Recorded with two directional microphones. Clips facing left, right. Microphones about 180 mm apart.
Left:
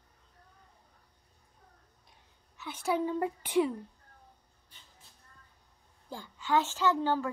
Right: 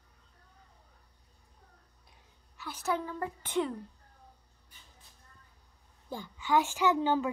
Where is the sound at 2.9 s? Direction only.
20° left (ahead or behind).